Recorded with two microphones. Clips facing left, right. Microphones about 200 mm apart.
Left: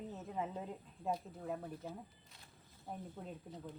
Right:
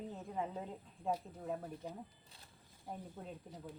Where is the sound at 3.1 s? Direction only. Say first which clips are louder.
Left 1 dB; 10° right (ahead or behind).